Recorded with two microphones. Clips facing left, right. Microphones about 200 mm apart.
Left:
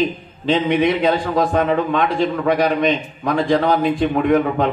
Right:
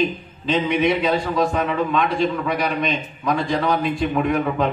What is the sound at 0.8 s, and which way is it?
A man's voice, 50° left (ahead or behind).